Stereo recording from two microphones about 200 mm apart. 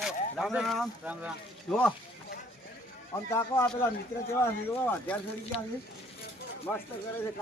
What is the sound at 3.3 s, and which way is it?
Speech, 15° left (ahead or behind).